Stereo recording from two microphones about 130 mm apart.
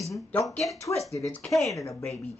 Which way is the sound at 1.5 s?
Centre (ahead or behind).